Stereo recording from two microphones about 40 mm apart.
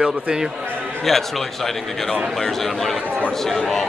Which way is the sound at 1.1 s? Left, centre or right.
Centre.